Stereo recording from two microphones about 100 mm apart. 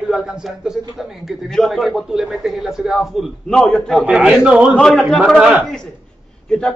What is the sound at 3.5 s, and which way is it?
Speech, 10° left (ahead or behind).